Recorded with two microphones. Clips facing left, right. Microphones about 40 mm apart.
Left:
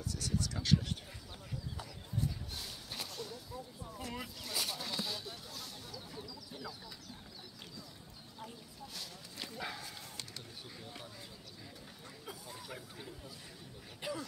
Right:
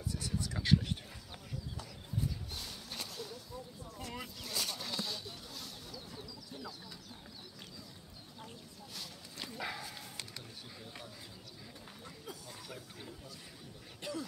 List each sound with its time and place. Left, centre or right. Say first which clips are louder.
0.0 s speech: left 1 dB; centre
2.5 s a sound: even; centre
8.9 s speech: right 1 dB; centre
12.3 s speech: left 2 dB; centre